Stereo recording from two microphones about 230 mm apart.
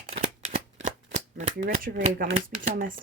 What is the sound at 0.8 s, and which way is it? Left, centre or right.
Speech, right.